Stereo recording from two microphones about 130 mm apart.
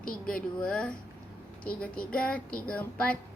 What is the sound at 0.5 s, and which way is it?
Speech, 5° left (ahead or behind).